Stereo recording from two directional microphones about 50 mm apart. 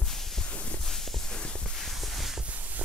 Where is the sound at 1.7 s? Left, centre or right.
Centre.